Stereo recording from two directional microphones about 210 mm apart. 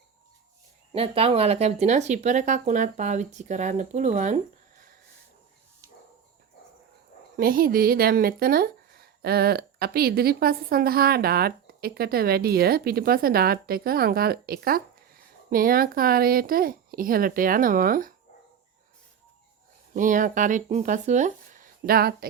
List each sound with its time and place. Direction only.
0.9 s speech: 30° right (ahead or behind)
7.3 s speech: 45° right (ahead or behind)
19.9 s speech: 40° right (ahead or behind)